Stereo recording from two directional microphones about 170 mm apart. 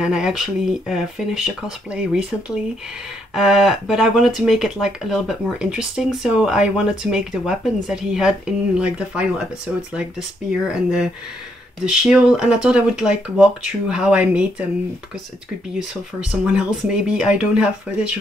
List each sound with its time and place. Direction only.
0.0 s speech: 5° right (ahead or behind)
10.5 s speech: 5° right (ahead or behind)
16.3 s speech: 5° right (ahead or behind)